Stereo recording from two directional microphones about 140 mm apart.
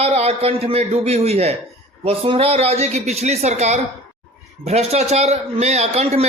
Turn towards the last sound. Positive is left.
turn(degrees=-50)  # may be behind; listen again after turning